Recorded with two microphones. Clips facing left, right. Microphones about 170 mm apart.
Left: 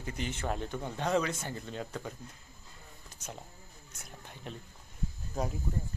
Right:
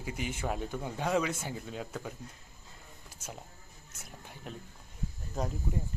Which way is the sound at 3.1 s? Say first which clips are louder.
Even; 5° right (ahead or behind).